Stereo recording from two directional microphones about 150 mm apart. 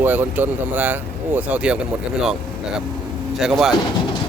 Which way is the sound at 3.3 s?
Centre (ahead or behind).